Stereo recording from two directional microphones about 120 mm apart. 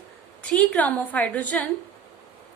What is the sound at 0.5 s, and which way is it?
A woman's voice, 10° left (ahead or behind).